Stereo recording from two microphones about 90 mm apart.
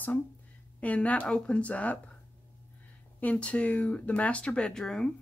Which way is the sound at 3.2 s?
15° left (ahead or behind).